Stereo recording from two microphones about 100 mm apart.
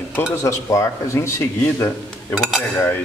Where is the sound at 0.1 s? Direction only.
30° left (ahead or behind).